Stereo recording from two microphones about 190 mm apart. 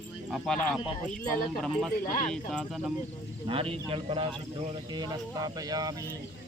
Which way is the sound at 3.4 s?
30° right (ahead or behind).